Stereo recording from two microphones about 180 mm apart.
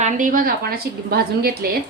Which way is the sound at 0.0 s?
45° right (ahead or behind).